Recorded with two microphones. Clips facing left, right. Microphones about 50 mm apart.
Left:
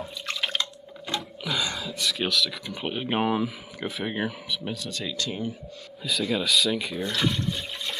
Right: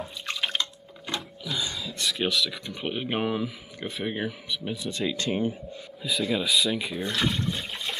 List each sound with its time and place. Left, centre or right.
0.3 s drip: centre
1.5 s a sound: left
1.9 s speech: centre
4.7 s speech: centre
6.0 s speech: centre